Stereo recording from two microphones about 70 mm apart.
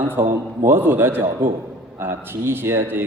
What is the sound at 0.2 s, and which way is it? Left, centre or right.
Speech, right.